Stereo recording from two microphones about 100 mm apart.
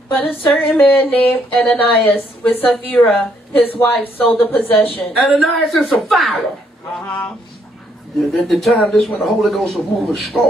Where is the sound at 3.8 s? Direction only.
20° left (ahead or behind).